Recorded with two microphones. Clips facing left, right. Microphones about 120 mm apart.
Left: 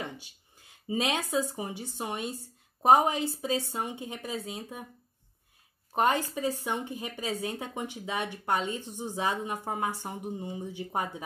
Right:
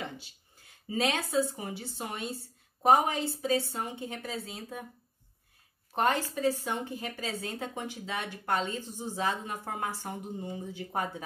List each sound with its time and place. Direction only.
0.6 s speech: 20° left (ahead or behind)
5.9 s speech: 15° left (ahead or behind)